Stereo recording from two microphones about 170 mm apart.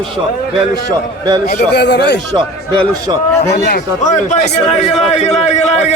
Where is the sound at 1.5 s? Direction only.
70° left (ahead or behind).